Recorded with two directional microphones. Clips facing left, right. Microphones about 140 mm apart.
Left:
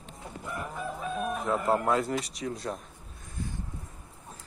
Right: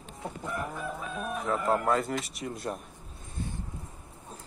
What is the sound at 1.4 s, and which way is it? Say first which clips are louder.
Speech: even; centre (ahead or behind).